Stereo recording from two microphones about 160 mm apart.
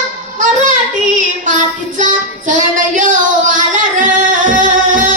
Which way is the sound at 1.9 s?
50° right (ahead or behind).